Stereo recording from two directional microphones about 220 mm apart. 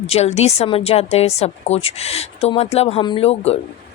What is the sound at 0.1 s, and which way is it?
A woman's voice, 30° left (ahead or behind).